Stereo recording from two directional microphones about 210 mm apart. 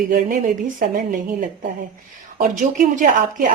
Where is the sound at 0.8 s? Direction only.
40° right (ahead or behind).